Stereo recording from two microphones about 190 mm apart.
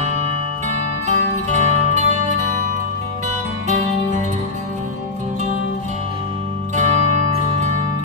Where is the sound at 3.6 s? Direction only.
35° right (ahead or behind).